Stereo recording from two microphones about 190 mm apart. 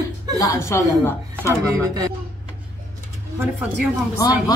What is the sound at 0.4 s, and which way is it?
Speech, 15° left (ahead or behind).